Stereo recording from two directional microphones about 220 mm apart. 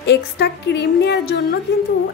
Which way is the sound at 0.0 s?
50° left (ahead or behind).